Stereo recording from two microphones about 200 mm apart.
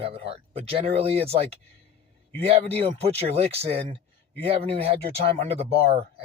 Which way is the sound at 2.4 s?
30° right (ahead or behind).